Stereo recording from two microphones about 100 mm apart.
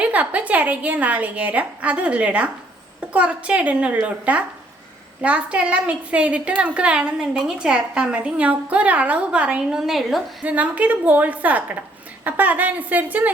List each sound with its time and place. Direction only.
0.0 s a woman's voice: 15° right (ahead or behind)
10.4 s a woman's voice: 15° right (ahead or behind)